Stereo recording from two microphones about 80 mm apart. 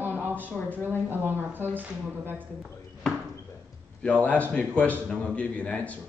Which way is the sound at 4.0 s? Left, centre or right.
Centre.